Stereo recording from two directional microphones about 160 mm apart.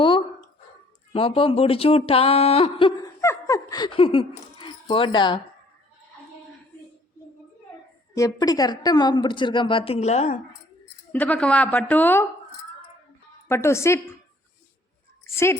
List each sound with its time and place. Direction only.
1.1 s speech: 35° left (ahead or behind)
3.2 s a sound: 20° left (ahead or behind)
8.1 s a woman's voice: 20° left (ahead or behind); by 10.4 s 45° left (ahead or behind)
11.1 s a woman's voice: 10° left (ahead or behind)
13.5 s a woman's voice: 15° left (ahead or behind)
15.2 s a sound: 15° left (ahead or behind)